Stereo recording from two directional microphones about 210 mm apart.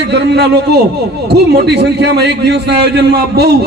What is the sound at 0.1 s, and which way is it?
A man's voice, 50° right (ahead or behind).